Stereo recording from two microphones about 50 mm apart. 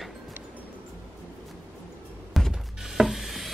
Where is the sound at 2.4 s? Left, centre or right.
Centre.